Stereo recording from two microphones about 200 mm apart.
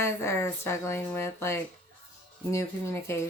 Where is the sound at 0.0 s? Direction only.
15° left (ahead or behind).